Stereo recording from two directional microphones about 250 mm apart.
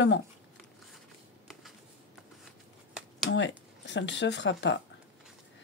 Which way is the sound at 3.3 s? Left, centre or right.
Left.